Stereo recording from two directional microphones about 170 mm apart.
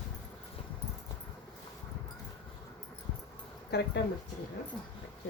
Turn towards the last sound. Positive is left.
turn(degrees=90)